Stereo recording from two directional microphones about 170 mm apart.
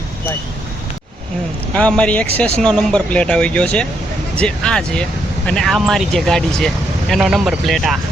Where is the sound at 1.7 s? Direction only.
5° left (ahead or behind).